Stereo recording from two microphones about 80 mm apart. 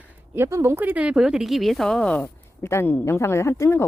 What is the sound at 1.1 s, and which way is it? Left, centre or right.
A woman's voice, centre.